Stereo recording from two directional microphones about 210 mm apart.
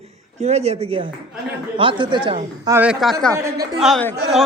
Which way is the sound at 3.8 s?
5° left (ahead or behind).